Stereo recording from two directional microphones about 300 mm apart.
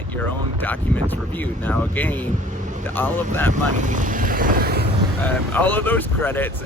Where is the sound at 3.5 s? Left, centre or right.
Right.